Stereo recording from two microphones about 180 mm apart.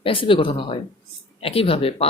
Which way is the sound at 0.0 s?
30° left (ahead or behind).